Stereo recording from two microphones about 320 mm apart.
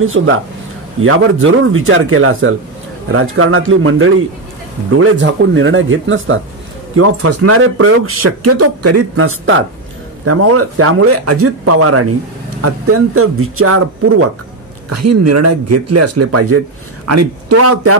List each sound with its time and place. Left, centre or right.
0.0 s speech: right